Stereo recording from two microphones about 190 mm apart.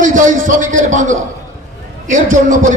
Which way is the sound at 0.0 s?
40° right (ahead or behind).